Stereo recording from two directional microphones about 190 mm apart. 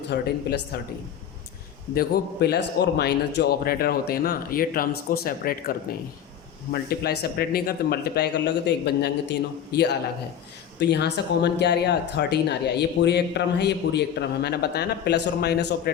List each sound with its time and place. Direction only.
0.1 s a man's voice: 60° left (ahead or behind)
2.0 s a man's voice: 60° left (ahead or behind)
6.7 s a man's voice: 55° left (ahead or behind)